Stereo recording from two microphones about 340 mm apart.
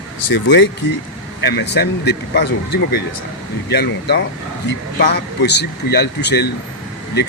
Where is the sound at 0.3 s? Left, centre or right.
Left.